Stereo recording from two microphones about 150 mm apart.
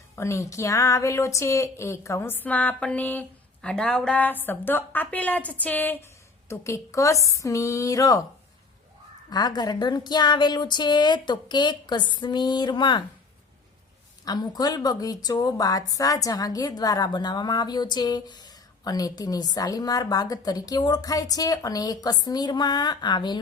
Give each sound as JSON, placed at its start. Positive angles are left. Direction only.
{"t": 0.2, "sound": "a woman's voice", "side_deg": 20}
{"t": 9.3, "sound": "a woman's voice", "side_deg": 25}
{"t": 14.3, "sound": "a woman's voice", "side_deg": 25}